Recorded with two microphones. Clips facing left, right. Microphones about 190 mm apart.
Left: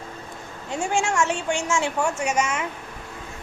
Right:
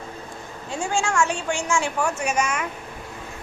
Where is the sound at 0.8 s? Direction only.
20° left (ahead or behind).